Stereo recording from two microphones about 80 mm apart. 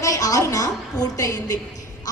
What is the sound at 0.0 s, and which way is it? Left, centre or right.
A woman's voice, left.